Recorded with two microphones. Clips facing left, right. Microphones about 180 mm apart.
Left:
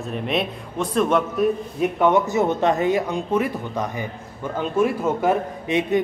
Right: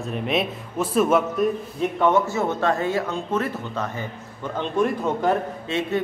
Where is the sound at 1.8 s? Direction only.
15° left (ahead or behind).